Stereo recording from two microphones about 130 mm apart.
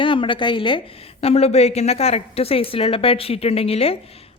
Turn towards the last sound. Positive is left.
turn(degrees=50)  # may be behind; listen again after turning